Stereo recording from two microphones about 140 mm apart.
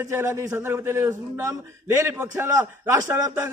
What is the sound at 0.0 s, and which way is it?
A man's voice, 15° right (ahead or behind).